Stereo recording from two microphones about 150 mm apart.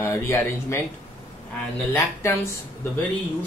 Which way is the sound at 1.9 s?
15° left (ahead or behind).